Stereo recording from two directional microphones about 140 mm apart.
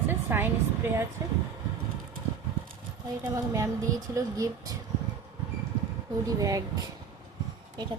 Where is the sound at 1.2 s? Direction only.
25° right (ahead or behind).